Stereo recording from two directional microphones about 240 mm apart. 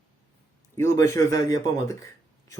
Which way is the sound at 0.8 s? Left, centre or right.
Centre.